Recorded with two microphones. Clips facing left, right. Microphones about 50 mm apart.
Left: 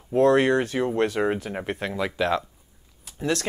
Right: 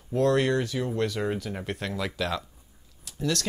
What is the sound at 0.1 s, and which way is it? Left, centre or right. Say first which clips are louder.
Speech: left 5 dB; left.